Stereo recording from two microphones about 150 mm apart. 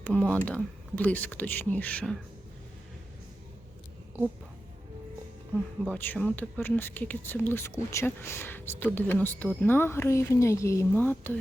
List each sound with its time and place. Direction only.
0.0 s speech: 5° left (ahead or behind)
5.8 s speech: 10° left (ahead or behind)